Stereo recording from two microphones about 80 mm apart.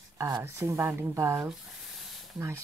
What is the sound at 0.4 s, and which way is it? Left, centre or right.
Speech, right.